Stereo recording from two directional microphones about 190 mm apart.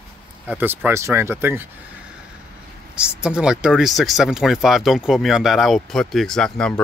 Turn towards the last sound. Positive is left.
turn(degrees=5)  # may be behind; listen again after turning